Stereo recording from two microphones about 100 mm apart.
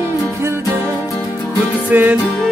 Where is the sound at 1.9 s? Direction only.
15° right (ahead or behind).